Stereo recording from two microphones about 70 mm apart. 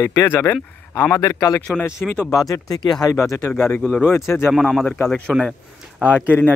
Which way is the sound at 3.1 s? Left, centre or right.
Left.